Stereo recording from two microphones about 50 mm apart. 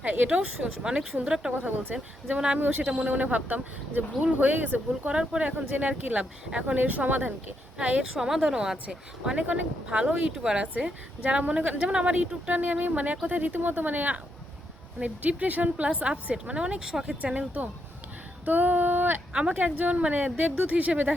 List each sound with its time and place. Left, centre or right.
0.0 s speech: right
0.3 s a woman's voice: right
1.6 s speech: right
5.5 s speech: right
7.8 s speech: right
8.1 s a woman's voice: centre
17.3 s speech: right
18.4 s a sound: right
19.3 s speech: right